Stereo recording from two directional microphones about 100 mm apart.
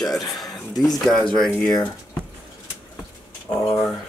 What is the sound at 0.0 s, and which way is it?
Speech, centre (ahead or behind).